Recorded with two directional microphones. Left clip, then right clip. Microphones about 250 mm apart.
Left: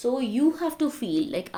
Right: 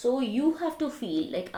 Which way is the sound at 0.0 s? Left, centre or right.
Left.